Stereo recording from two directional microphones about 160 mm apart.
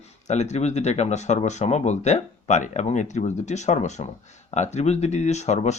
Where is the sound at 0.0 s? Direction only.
45° left (ahead or behind).